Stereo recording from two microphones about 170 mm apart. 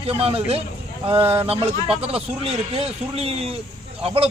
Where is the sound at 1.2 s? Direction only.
15° right (ahead or behind).